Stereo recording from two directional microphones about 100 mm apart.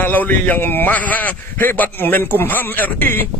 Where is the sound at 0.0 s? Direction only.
15° left (ahead or behind).